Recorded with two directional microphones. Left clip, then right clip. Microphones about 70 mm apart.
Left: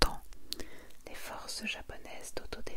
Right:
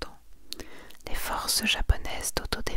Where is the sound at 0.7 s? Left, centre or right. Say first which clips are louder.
Right 9 dB; right.